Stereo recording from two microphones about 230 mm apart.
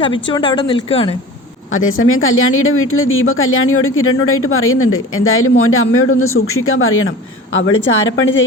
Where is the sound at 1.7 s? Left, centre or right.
Left.